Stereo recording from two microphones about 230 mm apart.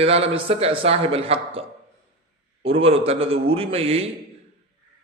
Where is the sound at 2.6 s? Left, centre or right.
Right.